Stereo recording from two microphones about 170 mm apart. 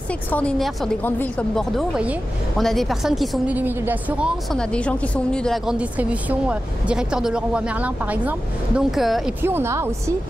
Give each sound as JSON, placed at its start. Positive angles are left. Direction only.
{"t": 0.3, "sound": "a woman's voice", "side_deg": 5}
{"t": 4.5, "sound": "a woman's voice", "side_deg": 5}
{"t": 9.4, "sound": "speech", "side_deg": -15}